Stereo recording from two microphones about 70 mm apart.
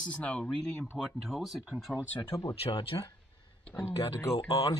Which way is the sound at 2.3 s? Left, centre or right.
Left.